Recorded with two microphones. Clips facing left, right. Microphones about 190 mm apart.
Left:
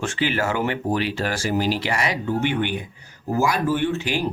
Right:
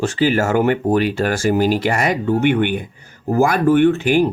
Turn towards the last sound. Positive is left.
turn(degrees=-55)  # may be behind; listen again after turning